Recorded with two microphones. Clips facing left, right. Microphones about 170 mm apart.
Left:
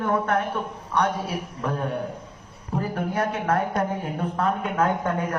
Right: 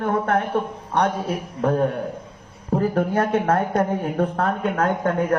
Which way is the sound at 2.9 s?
55° right (ahead or behind).